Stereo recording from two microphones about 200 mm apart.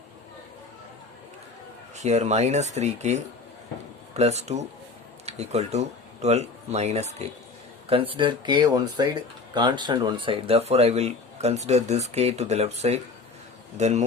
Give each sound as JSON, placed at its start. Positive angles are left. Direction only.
{"t": 2.0, "sound": "speech", "side_deg": -35}
{"t": 4.2, "sound": "speech", "side_deg": -35}